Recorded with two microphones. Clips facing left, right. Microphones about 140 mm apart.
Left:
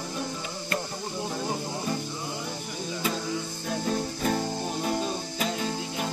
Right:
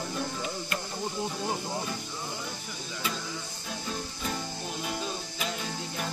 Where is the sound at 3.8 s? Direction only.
50° left (ahead or behind).